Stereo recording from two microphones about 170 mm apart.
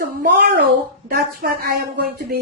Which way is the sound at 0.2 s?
60° right (ahead or behind).